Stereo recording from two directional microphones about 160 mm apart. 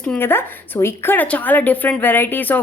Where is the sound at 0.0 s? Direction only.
10° left (ahead or behind).